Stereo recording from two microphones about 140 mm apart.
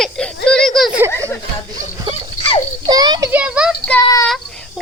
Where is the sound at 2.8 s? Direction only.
30° right (ahead or behind).